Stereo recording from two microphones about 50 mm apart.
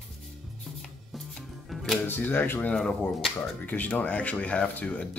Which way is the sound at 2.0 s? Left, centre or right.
Left.